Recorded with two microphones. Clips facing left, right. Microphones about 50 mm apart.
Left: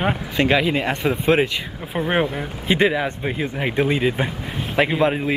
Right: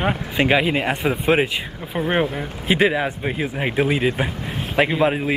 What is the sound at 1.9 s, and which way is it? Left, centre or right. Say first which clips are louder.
Speech: even; centre.